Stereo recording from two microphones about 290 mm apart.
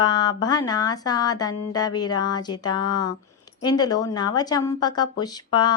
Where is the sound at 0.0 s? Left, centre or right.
Centre.